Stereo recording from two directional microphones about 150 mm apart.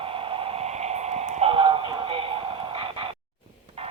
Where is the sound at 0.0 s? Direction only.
35° right (ahead or behind).